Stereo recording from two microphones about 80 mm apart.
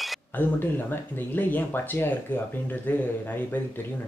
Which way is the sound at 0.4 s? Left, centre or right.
Left.